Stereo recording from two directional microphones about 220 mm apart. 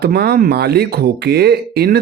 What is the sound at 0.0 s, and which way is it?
Speech, 45° right (ahead or behind).